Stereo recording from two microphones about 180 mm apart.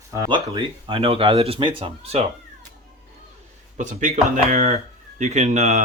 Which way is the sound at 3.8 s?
45° right (ahead or behind).